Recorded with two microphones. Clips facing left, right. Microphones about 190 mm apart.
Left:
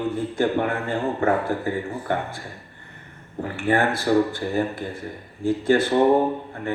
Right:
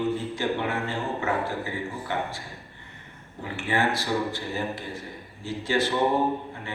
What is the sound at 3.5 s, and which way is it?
A man's voice, 55° left (ahead or behind).